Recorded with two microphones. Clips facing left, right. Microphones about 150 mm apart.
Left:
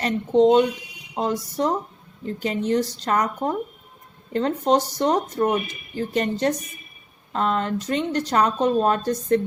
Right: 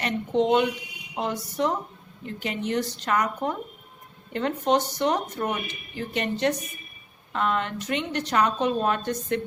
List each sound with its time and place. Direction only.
0.0 s speech: 35° left (ahead or behind)